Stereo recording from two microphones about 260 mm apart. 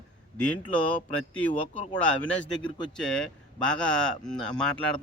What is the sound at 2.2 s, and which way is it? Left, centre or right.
Speech, centre.